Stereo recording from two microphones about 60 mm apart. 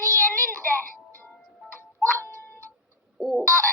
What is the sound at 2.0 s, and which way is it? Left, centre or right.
Music, left.